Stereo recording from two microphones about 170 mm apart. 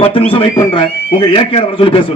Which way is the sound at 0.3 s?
30° left (ahead or behind).